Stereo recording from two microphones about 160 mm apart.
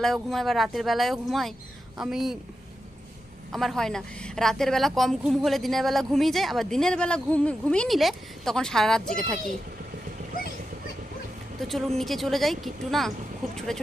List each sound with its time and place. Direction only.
0.0 s a woman's voice: centre (ahead or behind)
3.5 s a woman's voice: centre (ahead or behind)
11.7 s a woman's voice: centre (ahead or behind)